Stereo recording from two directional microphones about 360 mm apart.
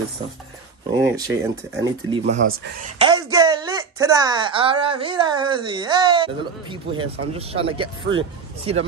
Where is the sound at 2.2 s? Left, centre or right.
Right.